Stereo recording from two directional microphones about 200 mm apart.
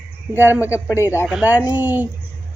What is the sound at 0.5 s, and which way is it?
Speech, 15° left (ahead or behind).